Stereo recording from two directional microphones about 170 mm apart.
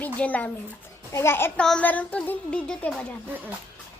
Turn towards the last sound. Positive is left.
turn(degrees=5)  # may be behind; listen again after turning